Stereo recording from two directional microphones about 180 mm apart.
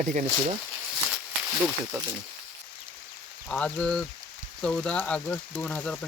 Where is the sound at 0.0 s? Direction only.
45° right (ahead or behind).